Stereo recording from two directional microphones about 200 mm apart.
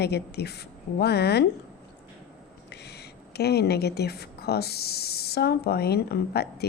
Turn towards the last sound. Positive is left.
turn(degrees=55)  # may be behind; listen again after turning